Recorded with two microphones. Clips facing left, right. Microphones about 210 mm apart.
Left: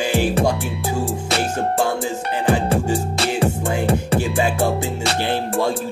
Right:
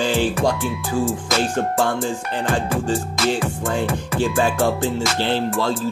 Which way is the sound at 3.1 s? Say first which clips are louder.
Left 1 dB; 35° left (ahead or behind).